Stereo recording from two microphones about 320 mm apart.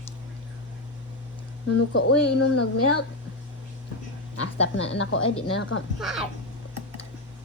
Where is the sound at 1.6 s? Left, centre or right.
Left.